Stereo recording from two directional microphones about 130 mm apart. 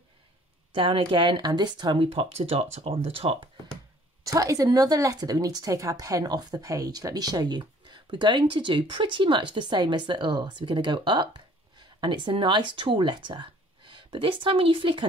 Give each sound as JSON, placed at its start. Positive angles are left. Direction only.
{"t": 0.7, "sound": "speech", "side_deg": -40}
{"t": 4.2, "sound": "speech", "side_deg": -25}